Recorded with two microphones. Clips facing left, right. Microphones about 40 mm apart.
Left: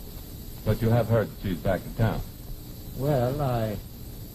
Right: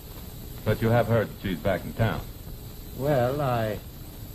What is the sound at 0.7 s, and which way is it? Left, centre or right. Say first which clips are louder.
Speech: right 2 dB; right.